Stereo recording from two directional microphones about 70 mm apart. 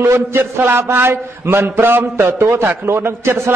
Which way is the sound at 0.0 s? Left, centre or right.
Right.